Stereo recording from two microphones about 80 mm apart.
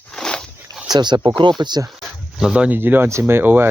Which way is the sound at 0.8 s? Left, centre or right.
Right.